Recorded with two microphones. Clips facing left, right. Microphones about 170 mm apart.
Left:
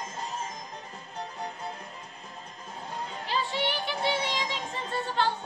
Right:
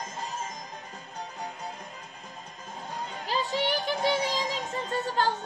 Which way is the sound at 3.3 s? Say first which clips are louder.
Right 2 dB; 40° right (ahead or behind).